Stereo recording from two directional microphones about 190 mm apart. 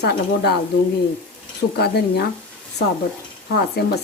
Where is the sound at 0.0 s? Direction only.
60° left (ahead or behind).